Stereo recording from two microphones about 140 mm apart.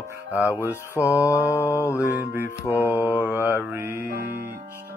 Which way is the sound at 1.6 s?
15° left (ahead or behind).